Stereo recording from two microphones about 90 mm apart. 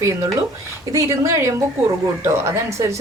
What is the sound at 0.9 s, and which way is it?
A woman's voice, 35° right (ahead or behind).